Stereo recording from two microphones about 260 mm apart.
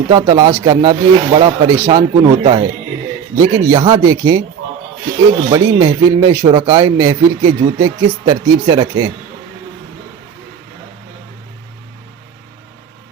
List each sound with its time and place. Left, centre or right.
0.1 s speech: centre
5.5 s speech: centre